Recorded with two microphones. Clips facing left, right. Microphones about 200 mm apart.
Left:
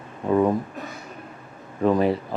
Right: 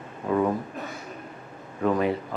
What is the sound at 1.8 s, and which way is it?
Speech, 35° left (ahead or behind).